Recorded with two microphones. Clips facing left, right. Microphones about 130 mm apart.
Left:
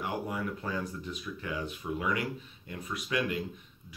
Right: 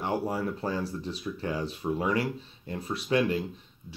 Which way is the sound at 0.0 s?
30° right (ahead or behind).